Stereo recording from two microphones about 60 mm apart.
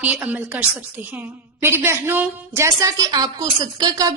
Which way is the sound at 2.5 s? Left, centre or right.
Right.